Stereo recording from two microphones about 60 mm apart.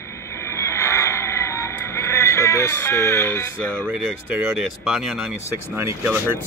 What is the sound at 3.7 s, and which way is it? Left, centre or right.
Speech, right.